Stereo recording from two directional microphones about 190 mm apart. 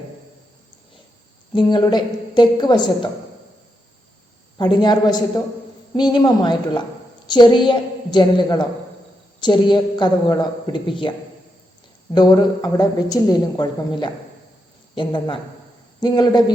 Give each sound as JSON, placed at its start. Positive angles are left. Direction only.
{"t": 1.5, "sound": "a woman's voice", "side_deg": 25}
{"t": 4.5, "sound": "a woman's voice", "side_deg": 25}
{"t": 12.1, "sound": "a woman's voice", "side_deg": 20}